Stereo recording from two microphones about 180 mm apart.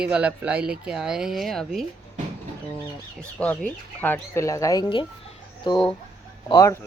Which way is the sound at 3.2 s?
5° left (ahead or behind).